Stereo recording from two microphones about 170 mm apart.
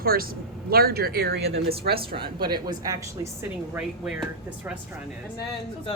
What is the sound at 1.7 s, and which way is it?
Speech, 35° right (ahead or behind).